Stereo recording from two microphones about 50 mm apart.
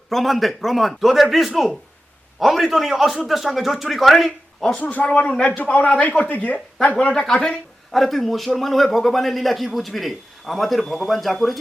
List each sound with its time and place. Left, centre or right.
0.1 s a man's voice: centre
4.8 s speech: left
5.0 s speech: left
7.1 s a man's voice: centre